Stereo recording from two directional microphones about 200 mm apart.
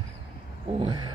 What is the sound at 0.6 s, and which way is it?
Speech, 25° right (ahead or behind).